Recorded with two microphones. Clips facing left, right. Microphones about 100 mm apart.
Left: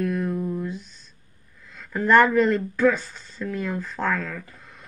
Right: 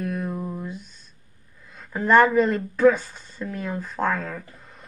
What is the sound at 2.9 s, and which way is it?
Speech, 50° right (ahead or behind).